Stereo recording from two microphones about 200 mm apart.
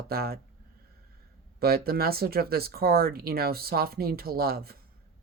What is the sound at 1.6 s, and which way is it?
Speech, 50° right (ahead or behind).